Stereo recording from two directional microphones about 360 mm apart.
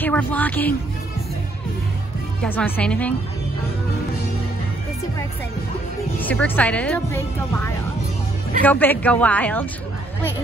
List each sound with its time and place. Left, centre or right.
0.0 s speech: centre
2.4 s speech: centre
6.1 s speech: centre